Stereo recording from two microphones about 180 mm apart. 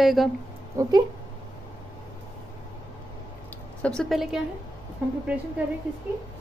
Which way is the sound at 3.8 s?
5° left (ahead or behind).